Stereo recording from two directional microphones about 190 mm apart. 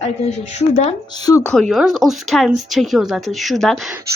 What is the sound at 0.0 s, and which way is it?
Speech, 35° left (ahead or behind).